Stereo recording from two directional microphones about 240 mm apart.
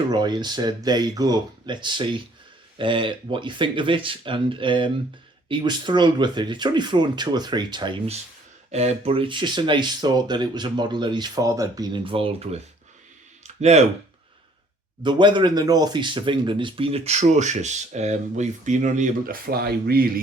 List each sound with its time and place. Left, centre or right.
0.1 s speech: centre
13.4 s a sound: right
15.0 s speech: centre; by 20.1 s right